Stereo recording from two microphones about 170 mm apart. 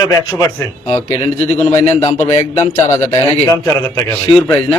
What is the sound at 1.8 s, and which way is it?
A man's voice, 15° left (ahead or behind).